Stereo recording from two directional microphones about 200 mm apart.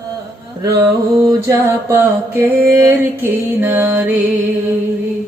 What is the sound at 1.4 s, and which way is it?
Mantra, 10° right (ahead or behind).